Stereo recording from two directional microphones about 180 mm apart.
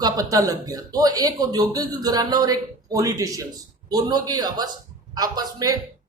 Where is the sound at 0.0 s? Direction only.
20° right (ahead or behind).